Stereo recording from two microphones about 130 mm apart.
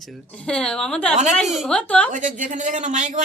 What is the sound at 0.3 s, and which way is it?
A woman's voice, 5° left (ahead or behind).